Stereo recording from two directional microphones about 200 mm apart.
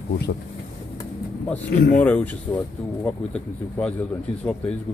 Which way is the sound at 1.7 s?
50° left (ahead or behind).